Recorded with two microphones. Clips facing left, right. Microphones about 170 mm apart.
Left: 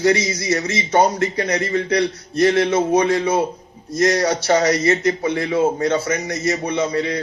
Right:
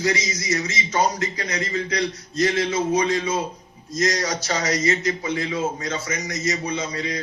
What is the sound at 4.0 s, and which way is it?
Speech, 30° left (ahead or behind).